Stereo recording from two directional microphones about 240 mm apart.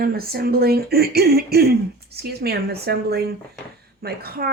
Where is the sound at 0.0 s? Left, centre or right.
Right.